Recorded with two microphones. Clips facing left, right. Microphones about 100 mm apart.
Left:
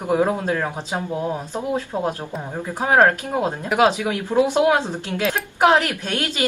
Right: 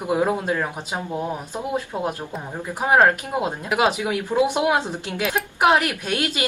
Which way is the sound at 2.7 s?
10° right (ahead or behind).